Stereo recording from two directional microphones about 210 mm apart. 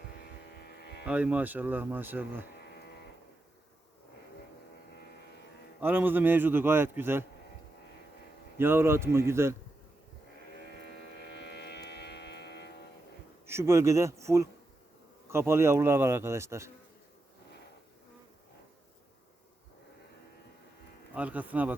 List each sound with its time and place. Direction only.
0.2 s a sound: 50° left (ahead or behind)
1.0 s speech: 5° right (ahead or behind)
2.6 s livestock: 50° left (ahead or behind)
5.8 s speech: 10° right (ahead or behind)
8.5 s speech: 10° right (ahead or behind)
11.2 s vehicle: 55° left (ahead or behind)
13.5 s speech: 10° right (ahead or behind)
21.2 s speech: 5° right (ahead or behind)